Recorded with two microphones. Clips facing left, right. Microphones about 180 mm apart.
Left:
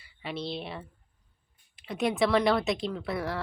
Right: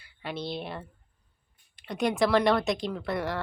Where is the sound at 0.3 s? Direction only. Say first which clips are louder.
Right 1 dB; centre (ahead or behind).